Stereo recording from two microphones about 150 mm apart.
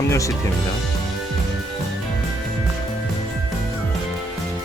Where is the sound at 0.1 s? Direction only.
20° left (ahead or behind).